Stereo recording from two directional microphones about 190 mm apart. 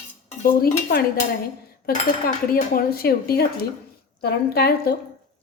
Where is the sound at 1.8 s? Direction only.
50° left (ahead or behind).